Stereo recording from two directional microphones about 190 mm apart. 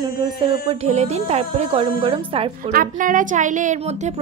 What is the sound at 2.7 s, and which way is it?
A woman's voice, 45° right (ahead or behind).